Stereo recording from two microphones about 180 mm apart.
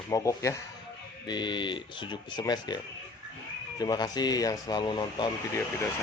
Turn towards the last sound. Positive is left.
turn(degrees=20)  # may be behind; listen again after turning